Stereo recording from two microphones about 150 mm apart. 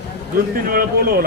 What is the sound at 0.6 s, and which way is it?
Speech, 80° right.